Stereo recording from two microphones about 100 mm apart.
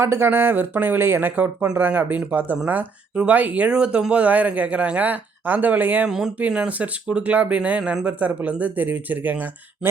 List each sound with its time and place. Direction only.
0.0 s speech: 25° right (ahead or behind)
6.1 s speech: 5° right (ahead or behind)